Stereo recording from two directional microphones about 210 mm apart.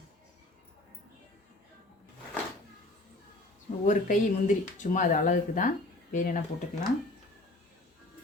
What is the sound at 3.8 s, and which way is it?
Speech, 35° left (ahead or behind).